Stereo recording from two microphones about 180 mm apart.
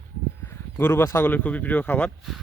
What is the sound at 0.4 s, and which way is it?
Speech, 10° left (ahead or behind).